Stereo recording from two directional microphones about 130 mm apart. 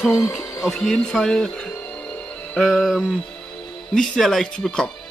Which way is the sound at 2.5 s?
Centre (ahead or behind).